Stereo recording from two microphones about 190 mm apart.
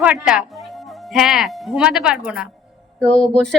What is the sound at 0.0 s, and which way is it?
Speech, 5° right (ahead or behind).